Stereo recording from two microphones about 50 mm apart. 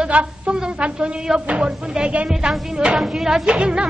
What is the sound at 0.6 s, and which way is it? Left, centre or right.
A woman's voice, centre.